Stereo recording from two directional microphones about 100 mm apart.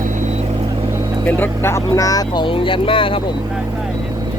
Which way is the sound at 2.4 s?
60° left (ahead or behind).